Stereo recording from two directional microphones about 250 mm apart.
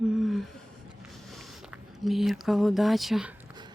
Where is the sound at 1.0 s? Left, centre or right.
Centre.